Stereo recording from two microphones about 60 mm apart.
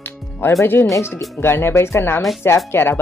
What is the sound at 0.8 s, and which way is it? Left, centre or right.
Speech, left.